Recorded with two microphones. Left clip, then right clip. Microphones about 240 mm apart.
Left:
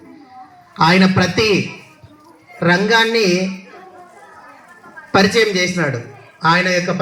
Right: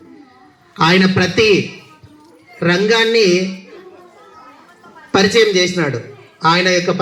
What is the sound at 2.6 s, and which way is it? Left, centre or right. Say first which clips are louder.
Speech: even; centre.